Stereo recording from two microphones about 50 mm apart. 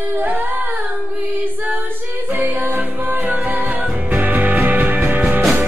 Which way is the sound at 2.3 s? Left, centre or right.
Right.